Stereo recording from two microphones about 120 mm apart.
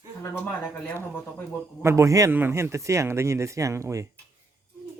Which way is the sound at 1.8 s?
25° right (ahead or behind).